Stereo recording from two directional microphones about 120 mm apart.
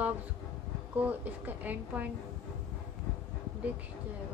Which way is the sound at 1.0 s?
15° right (ahead or behind).